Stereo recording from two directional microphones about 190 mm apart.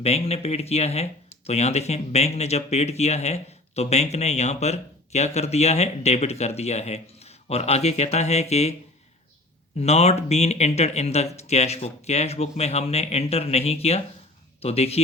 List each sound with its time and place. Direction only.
0.0 s speech: 35° left (ahead or behind)
9.7 s speech: 35° left (ahead or behind)